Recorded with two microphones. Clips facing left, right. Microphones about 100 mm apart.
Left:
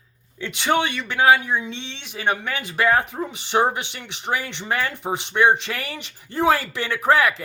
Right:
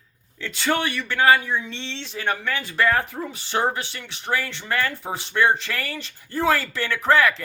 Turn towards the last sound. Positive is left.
turn(degrees=15)  # may be behind; listen again after turning